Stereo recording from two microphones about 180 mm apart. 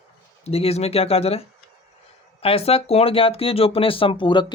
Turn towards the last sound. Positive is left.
turn(degrees=25)  # may be behind; listen again after turning